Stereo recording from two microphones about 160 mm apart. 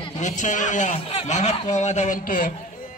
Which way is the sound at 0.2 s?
50° left (ahead or behind).